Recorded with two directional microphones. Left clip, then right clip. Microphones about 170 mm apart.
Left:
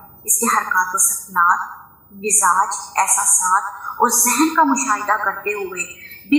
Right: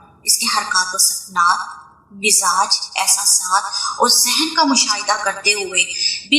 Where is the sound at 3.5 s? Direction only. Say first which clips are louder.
Right 1 dB; 10° right (ahead or behind).